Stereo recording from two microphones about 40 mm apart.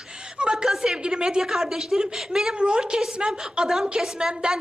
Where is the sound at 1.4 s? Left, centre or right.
Centre.